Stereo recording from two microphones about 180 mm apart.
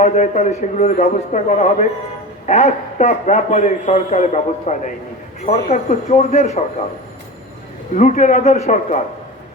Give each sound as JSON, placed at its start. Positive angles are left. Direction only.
{"t": 0.0, "sound": "a man's voice", "side_deg": 40}
{"t": 7.9, "sound": "a man's voice", "side_deg": 45}